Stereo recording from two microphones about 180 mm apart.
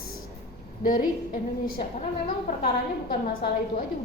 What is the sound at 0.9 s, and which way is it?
Speech, 50° left (ahead or behind).